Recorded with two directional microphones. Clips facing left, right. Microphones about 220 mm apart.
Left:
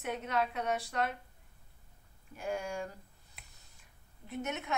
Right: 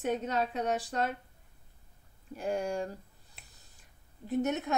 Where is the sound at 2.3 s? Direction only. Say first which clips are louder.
Right 5 dB; 35° right (ahead or behind).